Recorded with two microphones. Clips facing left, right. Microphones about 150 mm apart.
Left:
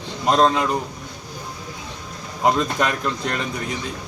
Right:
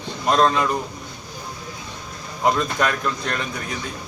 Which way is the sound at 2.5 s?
20° left (ahead or behind).